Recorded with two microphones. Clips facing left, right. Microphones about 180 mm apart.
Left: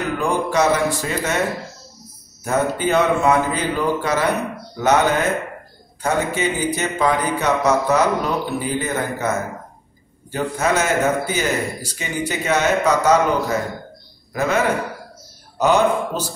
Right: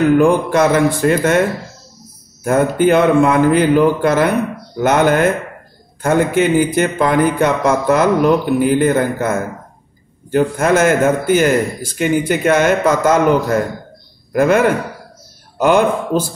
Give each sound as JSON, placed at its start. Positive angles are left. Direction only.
{"t": 0.2, "sound": "a man's voice", "side_deg": -55}
{"t": 2.4, "sound": "a man's voice", "side_deg": -55}